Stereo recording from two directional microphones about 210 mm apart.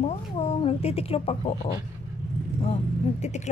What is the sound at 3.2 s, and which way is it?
Speech, 35° left (ahead or behind).